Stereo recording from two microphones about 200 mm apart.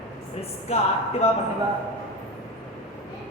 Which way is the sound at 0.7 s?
30° left (ahead or behind).